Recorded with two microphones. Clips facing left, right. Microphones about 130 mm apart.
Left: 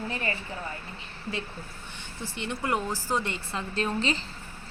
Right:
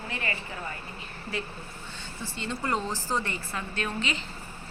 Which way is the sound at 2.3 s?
15° left (ahead or behind).